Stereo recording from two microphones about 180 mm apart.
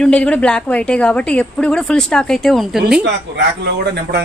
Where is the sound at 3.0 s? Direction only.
75° right (ahead or behind).